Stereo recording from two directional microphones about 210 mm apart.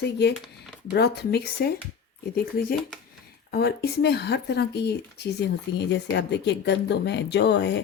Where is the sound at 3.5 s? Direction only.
50° left (ahead or behind).